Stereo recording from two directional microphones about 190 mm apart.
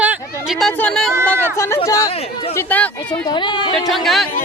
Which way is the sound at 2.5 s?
10° left (ahead or behind).